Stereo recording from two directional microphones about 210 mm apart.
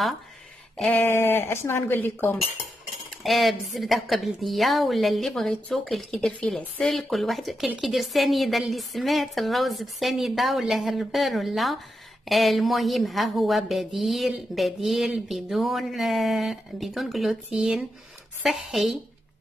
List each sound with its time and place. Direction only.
0.7 s a woman's voice: 5° left (ahead or behind)